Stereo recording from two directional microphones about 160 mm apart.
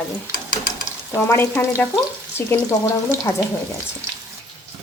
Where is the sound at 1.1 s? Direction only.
15° left (ahead or behind).